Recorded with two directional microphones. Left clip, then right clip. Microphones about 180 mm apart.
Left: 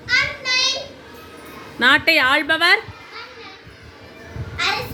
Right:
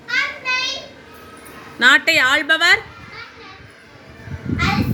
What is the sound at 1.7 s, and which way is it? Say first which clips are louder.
A woman's voice: right 2 dB; 15° left (ahead or behind).